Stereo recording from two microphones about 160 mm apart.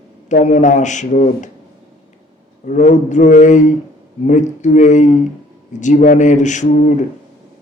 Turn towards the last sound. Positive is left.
turn(degrees=50)  # may be behind; listen again after turning